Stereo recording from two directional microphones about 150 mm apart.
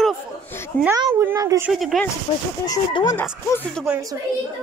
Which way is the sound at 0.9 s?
20° right (ahead or behind).